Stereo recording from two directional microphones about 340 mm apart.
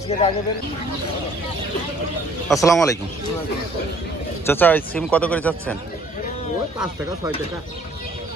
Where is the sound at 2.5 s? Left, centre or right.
Centre.